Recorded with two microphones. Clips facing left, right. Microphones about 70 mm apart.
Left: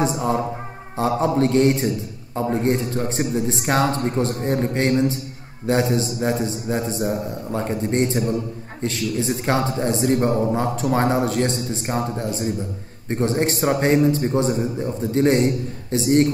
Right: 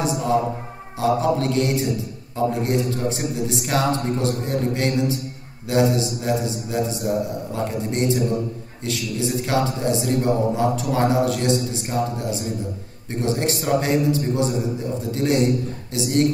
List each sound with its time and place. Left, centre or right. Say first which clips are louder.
0.0 s a man's voice: even; left
9.5 s a man's voice: left 1 dB; left